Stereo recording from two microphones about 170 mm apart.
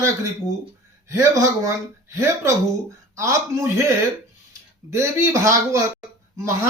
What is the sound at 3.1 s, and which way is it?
Speech, 20° right (ahead or behind).